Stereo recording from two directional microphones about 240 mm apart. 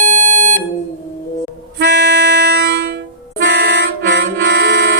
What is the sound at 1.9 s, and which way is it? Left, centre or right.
Music, right.